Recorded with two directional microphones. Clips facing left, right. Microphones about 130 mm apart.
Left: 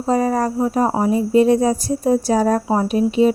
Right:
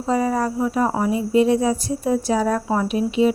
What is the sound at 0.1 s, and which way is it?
Speech, 40° left (ahead or behind).